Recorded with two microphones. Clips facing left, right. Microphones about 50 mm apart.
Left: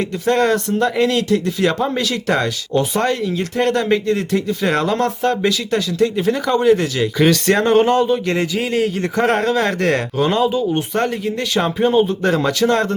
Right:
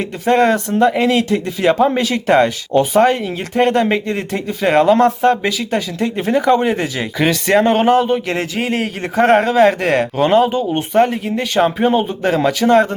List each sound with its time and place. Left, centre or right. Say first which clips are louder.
0.3 s speech: right 3 dB; centre
7.2 s speech: right 2 dB; centre